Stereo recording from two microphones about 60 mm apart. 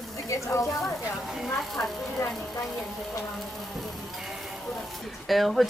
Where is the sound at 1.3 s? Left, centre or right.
Centre.